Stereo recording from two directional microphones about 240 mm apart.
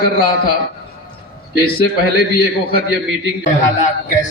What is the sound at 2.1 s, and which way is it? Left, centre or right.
A man's voice, left.